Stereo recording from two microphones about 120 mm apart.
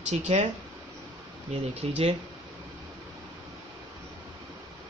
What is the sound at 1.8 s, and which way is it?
Speech, 60° right (ahead or behind).